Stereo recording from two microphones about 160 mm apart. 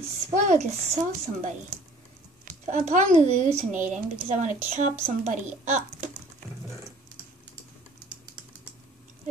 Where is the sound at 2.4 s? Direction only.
50° right (ahead or behind).